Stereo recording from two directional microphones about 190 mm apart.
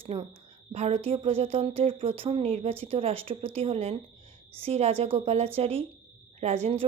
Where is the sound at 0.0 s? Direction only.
30° right (ahead or behind).